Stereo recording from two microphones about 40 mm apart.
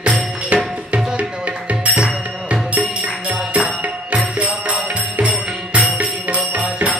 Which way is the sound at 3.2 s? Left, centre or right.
Right.